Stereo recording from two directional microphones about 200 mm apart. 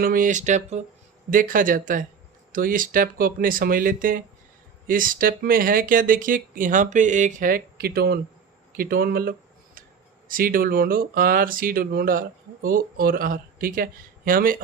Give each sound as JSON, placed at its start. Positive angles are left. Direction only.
{"t": 0.0, "sound": "speech", "side_deg": -45}